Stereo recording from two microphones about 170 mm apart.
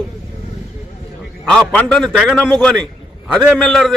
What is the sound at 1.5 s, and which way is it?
A man's voice, 5° left (ahead or behind).